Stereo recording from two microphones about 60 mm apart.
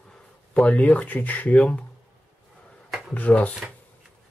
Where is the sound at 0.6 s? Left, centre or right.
Left.